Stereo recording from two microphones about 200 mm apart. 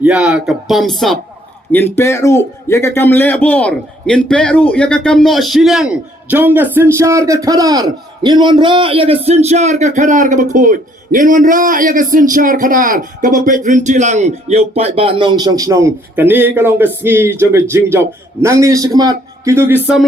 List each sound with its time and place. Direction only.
0.0 s speech: 5° right (ahead or behind)
1.7 s a man's voice: 10° left (ahead or behind); by 19.7 s 15° right (ahead or behind)